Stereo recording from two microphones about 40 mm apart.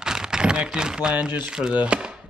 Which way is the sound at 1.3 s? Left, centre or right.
Right.